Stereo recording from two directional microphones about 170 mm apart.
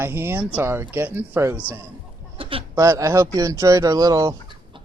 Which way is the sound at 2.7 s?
20° right (ahead or behind).